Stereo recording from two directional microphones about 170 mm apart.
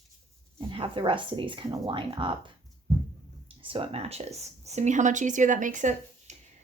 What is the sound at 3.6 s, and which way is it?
A woman's voice, 30° right (ahead or behind).